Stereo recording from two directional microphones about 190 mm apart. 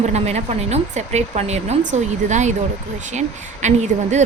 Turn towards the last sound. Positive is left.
turn(degrees=-40)  # may be behind; listen again after turning